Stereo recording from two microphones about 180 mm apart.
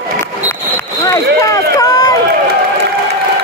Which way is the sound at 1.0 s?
20° left (ahead or behind).